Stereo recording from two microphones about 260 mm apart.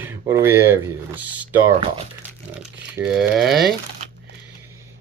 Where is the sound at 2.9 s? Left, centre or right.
Centre.